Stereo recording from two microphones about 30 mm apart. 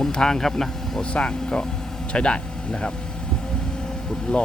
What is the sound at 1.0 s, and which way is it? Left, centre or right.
Speech, left.